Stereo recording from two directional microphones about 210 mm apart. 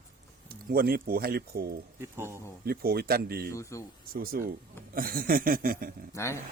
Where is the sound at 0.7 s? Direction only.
45° right (ahead or behind).